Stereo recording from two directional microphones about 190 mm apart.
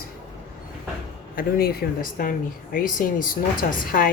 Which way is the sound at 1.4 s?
55° left (ahead or behind).